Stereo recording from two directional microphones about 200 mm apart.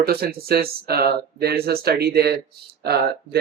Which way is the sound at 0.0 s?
50° right (ahead or behind).